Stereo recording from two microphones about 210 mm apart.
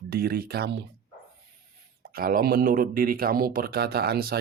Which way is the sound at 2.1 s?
45° right (ahead or behind).